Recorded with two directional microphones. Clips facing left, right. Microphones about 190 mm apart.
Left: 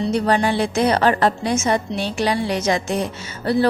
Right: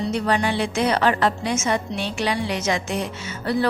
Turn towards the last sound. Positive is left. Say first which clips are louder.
# left 4 dB
turn(degrees=35)  # may be behind; listen again after turning